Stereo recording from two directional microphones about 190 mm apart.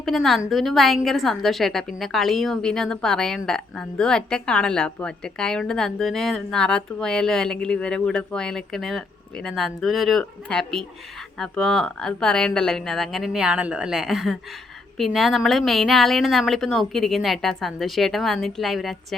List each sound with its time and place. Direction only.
0.0 s a woman's voice: centre (ahead or behind)